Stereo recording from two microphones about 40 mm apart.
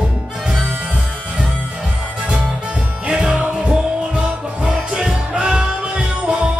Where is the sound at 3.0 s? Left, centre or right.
Right.